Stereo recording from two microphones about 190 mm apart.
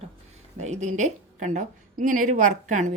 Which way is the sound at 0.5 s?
35° right (ahead or behind).